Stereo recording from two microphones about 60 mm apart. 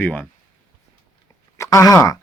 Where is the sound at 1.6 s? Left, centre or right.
Left.